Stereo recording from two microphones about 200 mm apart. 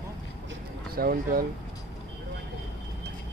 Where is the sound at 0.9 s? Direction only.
50° right (ahead or behind).